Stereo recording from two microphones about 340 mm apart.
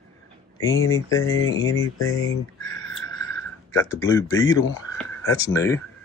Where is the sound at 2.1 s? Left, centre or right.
Centre.